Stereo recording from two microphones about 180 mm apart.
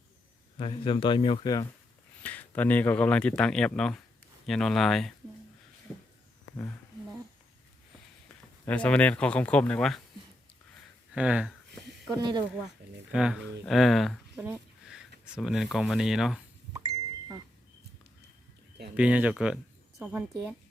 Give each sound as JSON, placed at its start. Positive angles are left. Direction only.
{"t": 0.6, "sound": "speech", "side_deg": 30}
{"t": 2.2, "sound": "speech", "side_deg": 10}
{"t": 8.6, "sound": "speech", "side_deg": 5}
{"t": 11.1, "sound": "a sound", "side_deg": -5}
{"t": 12.1, "sound": "speech", "side_deg": -25}
{"t": 13.1, "sound": "speech", "side_deg": -5}
{"t": 14.4, "sound": "a sound", "side_deg": -5}
{"t": 15.2, "sound": "speech", "side_deg": 0}
{"t": 18.9, "sound": "speech", "side_deg": -5}